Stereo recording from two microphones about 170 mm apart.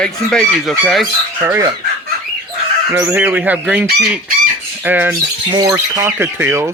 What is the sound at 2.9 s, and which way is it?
Speech, 10° right (ahead or behind).